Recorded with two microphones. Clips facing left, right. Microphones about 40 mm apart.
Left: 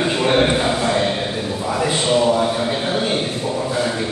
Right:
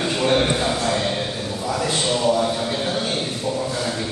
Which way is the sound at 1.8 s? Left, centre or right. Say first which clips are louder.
Left 5 dB; centre.